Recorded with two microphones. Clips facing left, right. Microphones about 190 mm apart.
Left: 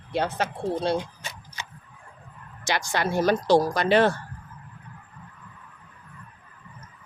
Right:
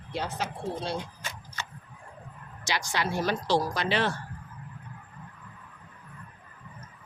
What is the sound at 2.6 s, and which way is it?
Speech, 50° left (ahead or behind).